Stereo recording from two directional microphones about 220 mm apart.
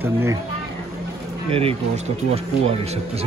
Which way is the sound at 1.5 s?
25° right (ahead or behind).